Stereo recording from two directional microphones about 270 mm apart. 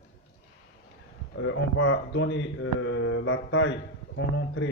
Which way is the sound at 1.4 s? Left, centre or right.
Left.